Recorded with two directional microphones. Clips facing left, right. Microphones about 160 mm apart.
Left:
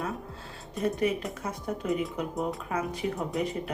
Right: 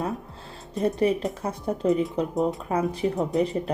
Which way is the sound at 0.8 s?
35° right (ahead or behind).